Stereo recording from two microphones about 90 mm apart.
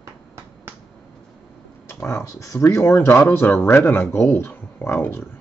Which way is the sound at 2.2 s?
35° left (ahead or behind).